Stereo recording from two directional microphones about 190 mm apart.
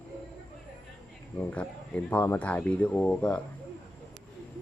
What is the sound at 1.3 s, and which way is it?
Speech, 5° left (ahead or behind).